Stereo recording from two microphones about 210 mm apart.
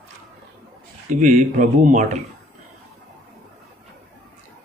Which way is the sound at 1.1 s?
35° right (ahead or behind).